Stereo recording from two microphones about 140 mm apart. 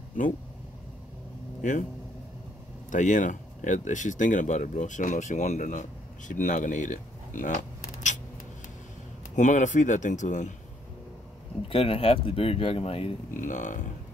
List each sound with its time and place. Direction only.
1.6 s speech: 65° left (ahead or behind)
2.9 s speech: 65° left (ahead or behind)
9.3 s speech: 60° left (ahead or behind)
11.7 s speech: 40° left (ahead or behind)
13.3 s speech: 65° left (ahead or behind)